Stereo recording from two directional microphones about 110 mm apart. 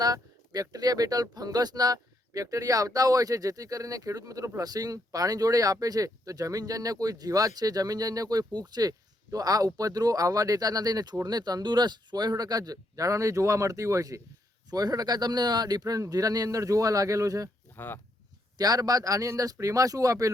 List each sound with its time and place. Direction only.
0.0 s speech: 35° right (ahead or behind)
17.7 s speech: 20° left (ahead or behind)
18.5 s speech: 35° right (ahead or behind)